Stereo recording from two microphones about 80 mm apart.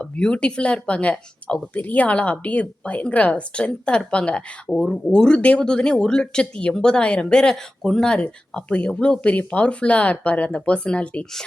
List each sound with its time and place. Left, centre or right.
0.0 s speech: centre